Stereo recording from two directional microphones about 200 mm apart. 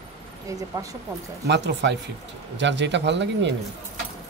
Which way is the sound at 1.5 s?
60° right (ahead or behind).